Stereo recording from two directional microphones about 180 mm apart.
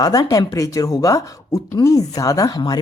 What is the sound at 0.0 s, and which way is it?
Speech, 20° left (ahead or behind).